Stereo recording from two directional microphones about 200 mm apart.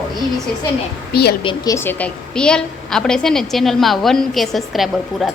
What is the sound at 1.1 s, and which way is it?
Speech, 55° left (ahead or behind).